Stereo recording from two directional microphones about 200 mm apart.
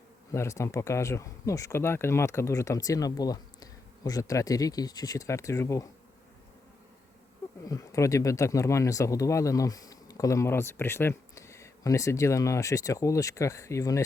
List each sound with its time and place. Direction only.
0.3 s speech: 15° left (ahead or behind)
7.6 s speech: 15° left (ahead or behind)